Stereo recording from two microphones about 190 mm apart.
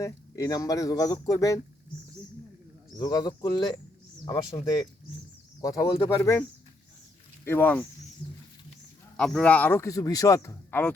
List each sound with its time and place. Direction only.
0.0 s a man's voice: 20° left (ahead or behind)
3.0 s a man's voice: 20° left (ahead or behind)
7.4 s a man's voice: 10° left (ahead or behind)
9.1 s a man's voice: 5° left (ahead or behind)